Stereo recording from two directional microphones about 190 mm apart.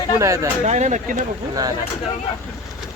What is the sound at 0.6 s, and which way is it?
Speech, 40° right (ahead or behind).